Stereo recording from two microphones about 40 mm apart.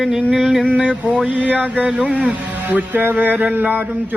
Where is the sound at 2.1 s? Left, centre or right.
Right.